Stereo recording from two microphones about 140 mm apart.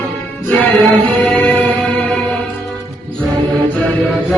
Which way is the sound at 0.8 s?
10° left (ahead or behind).